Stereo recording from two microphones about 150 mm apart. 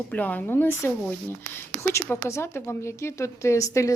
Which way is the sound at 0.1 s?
10° left (ahead or behind).